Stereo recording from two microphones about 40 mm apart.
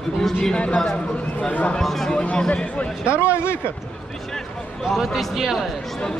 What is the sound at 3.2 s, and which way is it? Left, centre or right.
Speech, left.